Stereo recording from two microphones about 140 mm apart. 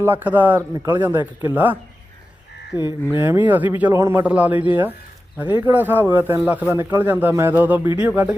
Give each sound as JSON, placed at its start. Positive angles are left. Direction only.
{"t": 0.0, "sound": "speech", "side_deg": -15}
{"t": 2.7, "sound": "frog", "side_deg": 30}
{"t": 3.2, "sound": "speech", "side_deg": -15}